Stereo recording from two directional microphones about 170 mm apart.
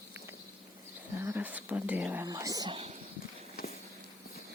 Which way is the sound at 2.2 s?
20° right (ahead or behind).